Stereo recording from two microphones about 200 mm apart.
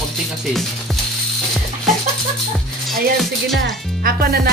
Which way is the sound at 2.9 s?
Centre (ahead or behind).